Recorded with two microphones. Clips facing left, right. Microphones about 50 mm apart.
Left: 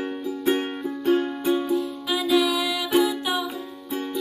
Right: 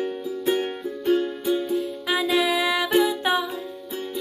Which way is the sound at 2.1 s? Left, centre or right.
Right.